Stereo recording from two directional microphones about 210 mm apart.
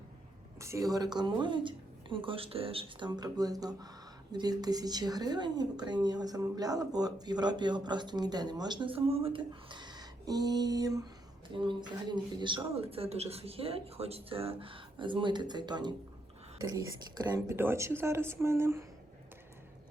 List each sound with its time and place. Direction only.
0.6 s a woman's voice: 15° right (ahead or behind)